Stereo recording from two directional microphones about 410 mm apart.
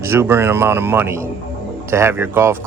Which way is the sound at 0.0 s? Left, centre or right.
Centre.